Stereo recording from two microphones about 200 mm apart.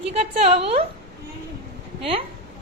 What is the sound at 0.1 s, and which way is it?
Speech, 30° right (ahead or behind).